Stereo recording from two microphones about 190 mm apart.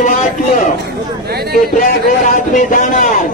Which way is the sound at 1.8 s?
45° left (ahead or behind).